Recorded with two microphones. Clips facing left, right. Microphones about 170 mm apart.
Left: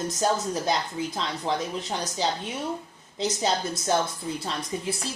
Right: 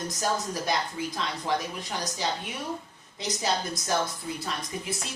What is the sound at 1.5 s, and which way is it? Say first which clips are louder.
Speech: left 1 dB; 30° left (ahead or behind).